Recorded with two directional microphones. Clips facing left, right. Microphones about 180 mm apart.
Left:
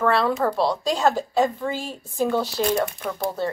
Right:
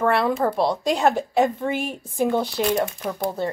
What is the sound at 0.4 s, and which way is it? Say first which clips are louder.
A woman's voice: right 1 dB; 20° right (ahead or behind).